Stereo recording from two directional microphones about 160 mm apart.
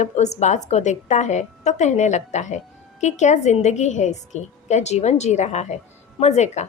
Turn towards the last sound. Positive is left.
turn(degrees=45)  # may be behind; listen again after turning